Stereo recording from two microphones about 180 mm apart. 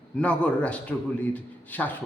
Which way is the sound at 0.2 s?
5° left (ahead or behind).